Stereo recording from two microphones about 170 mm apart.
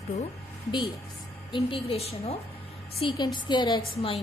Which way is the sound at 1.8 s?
35° left (ahead or behind).